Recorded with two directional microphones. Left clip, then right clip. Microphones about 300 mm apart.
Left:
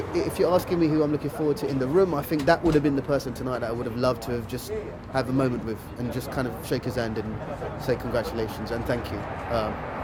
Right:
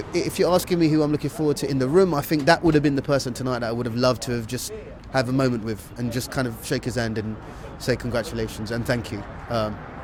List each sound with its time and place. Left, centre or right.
0.1 s speech: right